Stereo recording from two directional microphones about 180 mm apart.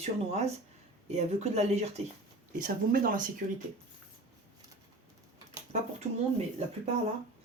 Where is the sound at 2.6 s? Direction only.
50° right (ahead or behind).